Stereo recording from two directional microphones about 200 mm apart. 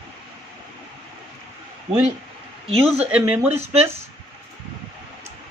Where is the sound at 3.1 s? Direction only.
10° right (ahead or behind).